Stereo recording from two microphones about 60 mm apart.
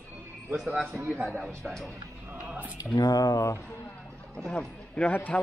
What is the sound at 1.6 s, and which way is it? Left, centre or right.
Speech, centre.